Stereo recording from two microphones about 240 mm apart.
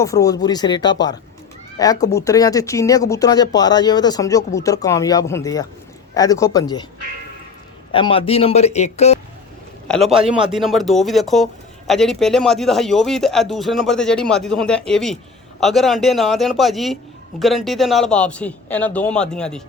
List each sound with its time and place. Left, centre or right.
0.0 s speech: centre
7.9 s speech: left
9.9 s speech: centre